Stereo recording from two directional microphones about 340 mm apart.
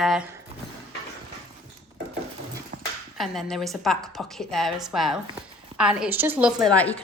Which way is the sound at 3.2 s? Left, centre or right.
Centre.